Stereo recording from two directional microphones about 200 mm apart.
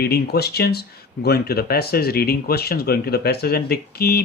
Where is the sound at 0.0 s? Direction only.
50° left (ahead or behind).